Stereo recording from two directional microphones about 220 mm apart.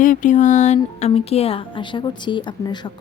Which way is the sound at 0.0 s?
35° left (ahead or behind).